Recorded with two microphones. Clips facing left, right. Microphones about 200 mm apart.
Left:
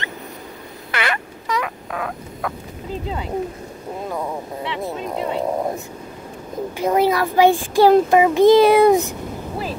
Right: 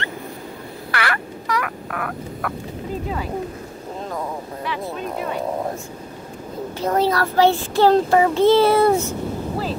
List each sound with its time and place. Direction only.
0.9 s a sound: 20° left (ahead or behind)
4.6 s speech: 25° left (ahead or behind)
6.8 s a child's voice: 10° left (ahead or behind)